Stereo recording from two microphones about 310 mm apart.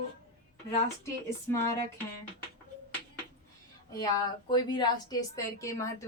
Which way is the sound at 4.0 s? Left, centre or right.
Centre.